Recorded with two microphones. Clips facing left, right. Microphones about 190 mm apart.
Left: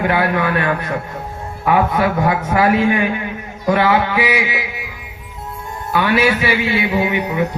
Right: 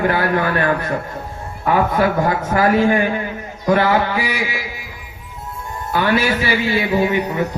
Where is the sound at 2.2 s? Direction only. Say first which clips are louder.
Left 1 dB; 40° right (ahead or behind).